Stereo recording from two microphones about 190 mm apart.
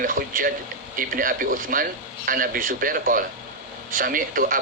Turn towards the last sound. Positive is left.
turn(degrees=-45)  # may be behind; listen again after turning